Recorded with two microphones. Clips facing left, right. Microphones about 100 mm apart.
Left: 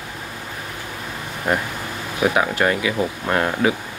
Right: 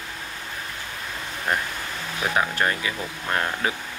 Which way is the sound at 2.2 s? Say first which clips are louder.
Left 5 dB; 15° left (ahead or behind).